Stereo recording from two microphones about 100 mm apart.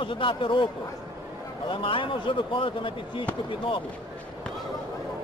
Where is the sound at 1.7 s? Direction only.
60° left (ahead or behind).